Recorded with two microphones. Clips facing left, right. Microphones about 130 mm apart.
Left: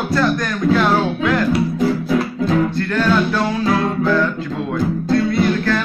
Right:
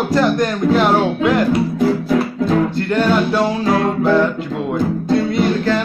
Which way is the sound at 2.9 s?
20° right (ahead or behind).